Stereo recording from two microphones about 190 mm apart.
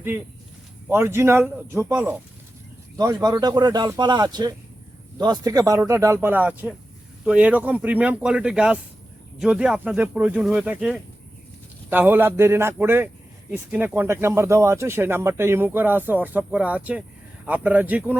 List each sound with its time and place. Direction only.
0.9 s speech: 15° right (ahead or behind)